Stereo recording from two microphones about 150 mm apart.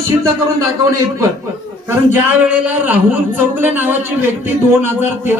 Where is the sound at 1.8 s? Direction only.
10° right (ahead or behind).